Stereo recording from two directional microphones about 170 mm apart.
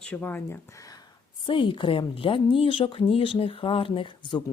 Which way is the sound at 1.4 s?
30° left (ahead or behind).